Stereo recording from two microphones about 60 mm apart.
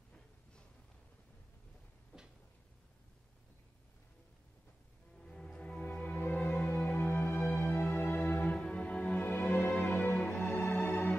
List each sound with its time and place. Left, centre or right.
5.2 s music: centre